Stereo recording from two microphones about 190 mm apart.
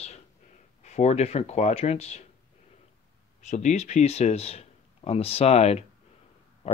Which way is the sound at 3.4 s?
35° left (ahead or behind).